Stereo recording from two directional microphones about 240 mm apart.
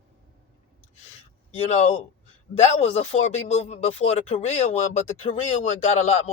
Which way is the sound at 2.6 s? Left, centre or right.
Left.